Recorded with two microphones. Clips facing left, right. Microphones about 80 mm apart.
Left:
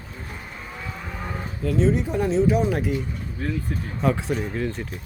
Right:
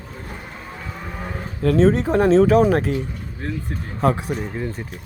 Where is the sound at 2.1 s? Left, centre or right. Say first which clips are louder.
Right 7 dB; right.